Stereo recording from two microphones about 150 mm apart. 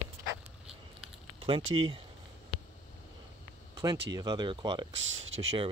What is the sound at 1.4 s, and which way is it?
Speech, 35° right (ahead or behind).